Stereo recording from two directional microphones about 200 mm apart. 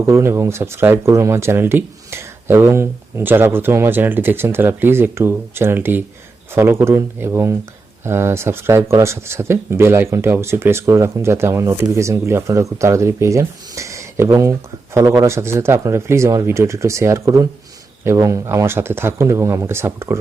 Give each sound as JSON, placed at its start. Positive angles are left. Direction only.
{"t": 0.1, "sound": "speech", "side_deg": -15}